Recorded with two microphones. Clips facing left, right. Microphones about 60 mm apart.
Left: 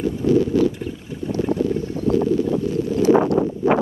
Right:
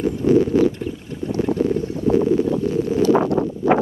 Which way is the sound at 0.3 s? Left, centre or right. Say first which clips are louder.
Right 2 dB; right.